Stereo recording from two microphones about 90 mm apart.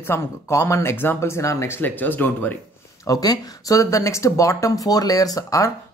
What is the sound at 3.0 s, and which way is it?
Speech, 45° left (ahead or behind).